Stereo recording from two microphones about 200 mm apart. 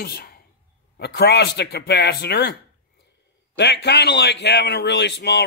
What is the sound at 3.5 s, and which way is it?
Speech, 60° left (ahead or behind).